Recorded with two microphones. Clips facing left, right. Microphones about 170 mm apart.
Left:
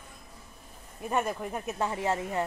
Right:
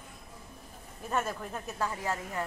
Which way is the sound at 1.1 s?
15° left (ahead or behind).